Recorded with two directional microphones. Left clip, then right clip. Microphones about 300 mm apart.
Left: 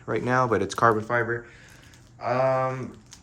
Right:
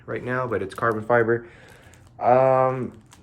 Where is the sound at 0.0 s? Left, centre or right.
Centre.